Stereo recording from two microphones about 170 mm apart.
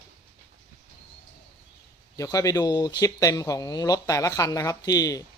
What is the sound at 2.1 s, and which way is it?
Speech, 20° left (ahead or behind).